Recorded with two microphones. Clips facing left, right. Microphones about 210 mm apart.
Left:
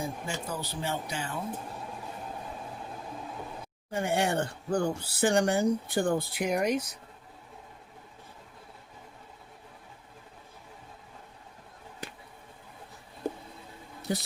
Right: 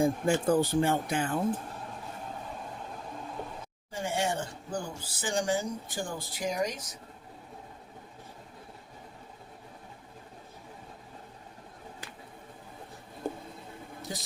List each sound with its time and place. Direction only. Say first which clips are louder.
0.0 s speech: right 10 dB; 50° right (ahead or behind)
3.9 s speech: left 3 dB; 60° left (ahead or behind)
14.0 s a sound: left 8 dB; 60° left (ahead or behind)